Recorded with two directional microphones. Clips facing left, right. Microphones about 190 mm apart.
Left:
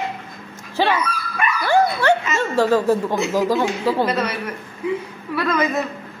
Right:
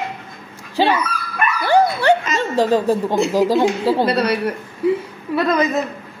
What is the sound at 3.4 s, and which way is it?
Speech, 35° right (ahead or behind).